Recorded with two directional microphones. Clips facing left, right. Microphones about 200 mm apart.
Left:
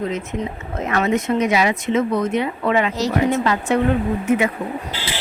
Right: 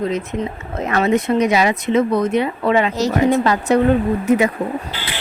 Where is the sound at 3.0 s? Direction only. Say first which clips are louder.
Right 3 dB; 45° right (ahead or behind).